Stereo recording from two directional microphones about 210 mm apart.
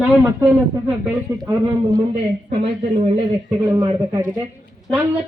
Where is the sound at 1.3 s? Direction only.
15° right (ahead or behind).